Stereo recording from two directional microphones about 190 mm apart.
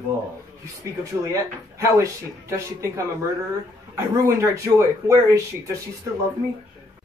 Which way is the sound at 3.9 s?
15° right (ahead or behind).